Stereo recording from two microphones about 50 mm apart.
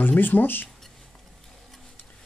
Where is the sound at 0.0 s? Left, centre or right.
Left.